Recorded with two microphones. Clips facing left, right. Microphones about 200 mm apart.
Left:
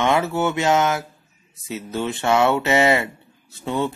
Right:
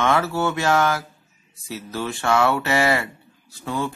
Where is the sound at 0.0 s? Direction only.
20° left (ahead or behind).